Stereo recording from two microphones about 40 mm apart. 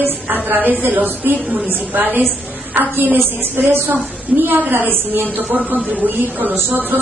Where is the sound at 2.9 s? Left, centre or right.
Right.